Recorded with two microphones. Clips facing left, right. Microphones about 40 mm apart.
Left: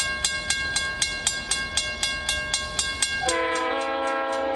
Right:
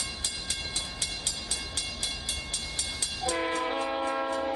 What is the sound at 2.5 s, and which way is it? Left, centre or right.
Train, left.